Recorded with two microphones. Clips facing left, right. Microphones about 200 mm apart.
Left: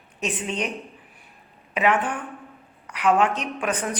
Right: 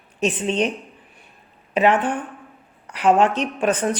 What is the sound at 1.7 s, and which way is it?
A woman's voice, 30° right (ahead or behind).